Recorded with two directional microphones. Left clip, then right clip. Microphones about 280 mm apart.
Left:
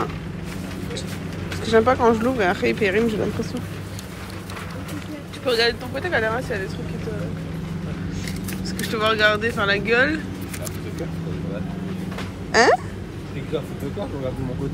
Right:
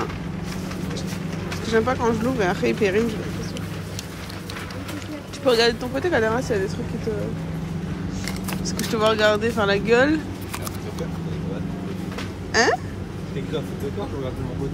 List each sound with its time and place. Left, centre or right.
1.7 s speech: centre
5.4 s speech: centre
8.9 s speech: centre
12.5 s speech: centre